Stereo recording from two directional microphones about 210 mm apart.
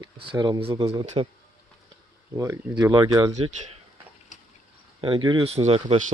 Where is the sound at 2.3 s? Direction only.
15° right (ahead or behind).